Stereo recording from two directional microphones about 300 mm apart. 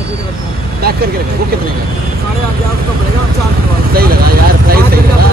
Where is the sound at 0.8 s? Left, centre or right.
Right.